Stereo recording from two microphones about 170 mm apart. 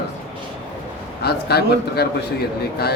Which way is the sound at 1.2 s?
70° left (ahead or behind).